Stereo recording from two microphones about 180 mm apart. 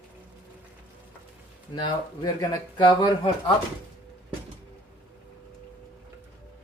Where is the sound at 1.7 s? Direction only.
25° left (ahead or behind).